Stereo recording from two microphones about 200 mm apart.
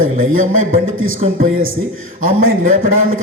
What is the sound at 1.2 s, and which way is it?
Speech, 35° right (ahead or behind).